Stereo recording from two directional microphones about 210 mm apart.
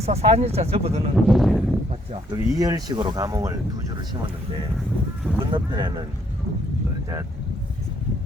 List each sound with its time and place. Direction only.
0.0 s speech: 30° right (ahead or behind)
1.1 s speech: centre (ahead or behind)
1.9 s speech: 20° right (ahead or behind)
5.5 s speech: 20° right (ahead or behind)